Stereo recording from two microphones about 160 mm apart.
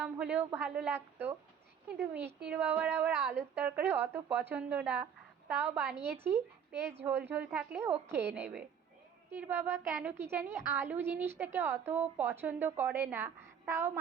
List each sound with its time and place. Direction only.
0.0 s a woman's voice: 10° right (ahead or behind)
8.1 s a woman's voice: 90° right
8.4 s a woman's voice: 10° right (ahead or behind)